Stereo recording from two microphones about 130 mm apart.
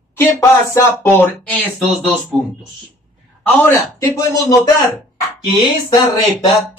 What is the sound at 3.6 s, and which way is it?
Speech, 20° left (ahead or behind).